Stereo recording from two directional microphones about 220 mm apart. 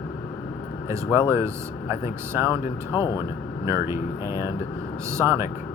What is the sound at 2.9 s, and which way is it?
Speech, 15° left (ahead or behind).